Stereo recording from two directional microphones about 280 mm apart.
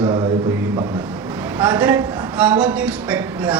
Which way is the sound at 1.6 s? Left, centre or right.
Centre.